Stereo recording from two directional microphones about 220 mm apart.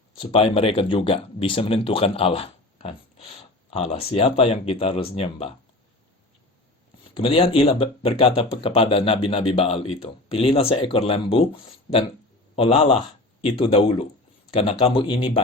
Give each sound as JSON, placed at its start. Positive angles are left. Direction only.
{"t": 0.2, "sound": "speech", "side_deg": 25}
{"t": 7.1, "sound": "speech", "side_deg": 25}